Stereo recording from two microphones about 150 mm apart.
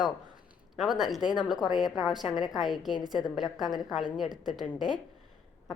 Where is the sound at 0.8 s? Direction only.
Centre (ahead or behind).